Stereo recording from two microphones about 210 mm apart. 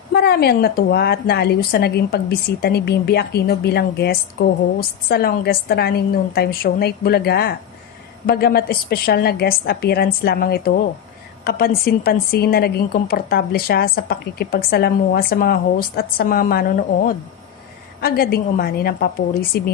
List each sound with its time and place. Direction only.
0.1 s a woman's voice: 50° left (ahead or behind)